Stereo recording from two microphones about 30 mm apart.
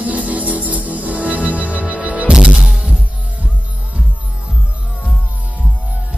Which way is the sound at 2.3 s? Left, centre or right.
Right.